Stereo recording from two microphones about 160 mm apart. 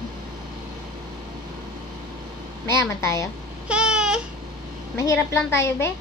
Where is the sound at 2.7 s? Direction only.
20° left (ahead or behind).